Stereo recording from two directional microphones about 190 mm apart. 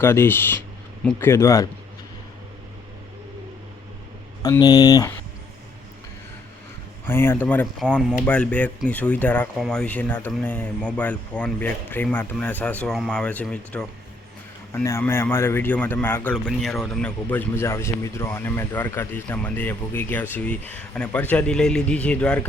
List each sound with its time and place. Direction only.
0.0 s a man's voice: 10° left (ahead or behind)
4.4 s speech: 20° left (ahead or behind)
7.1 s a man's voice: 10° left (ahead or behind)